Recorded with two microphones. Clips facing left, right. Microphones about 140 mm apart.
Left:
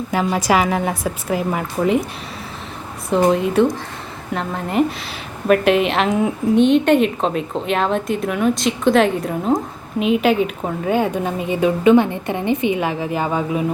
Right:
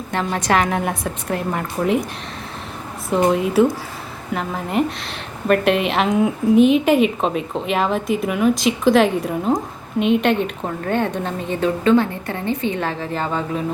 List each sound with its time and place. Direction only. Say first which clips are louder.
0.1 s a woman's voice: left 2 dB; 5° left (ahead or behind)
3.1 s a woman's voice: left 1 dB; centre (ahead or behind)